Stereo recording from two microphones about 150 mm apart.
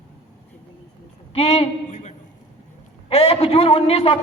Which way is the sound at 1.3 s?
40° left (ahead or behind).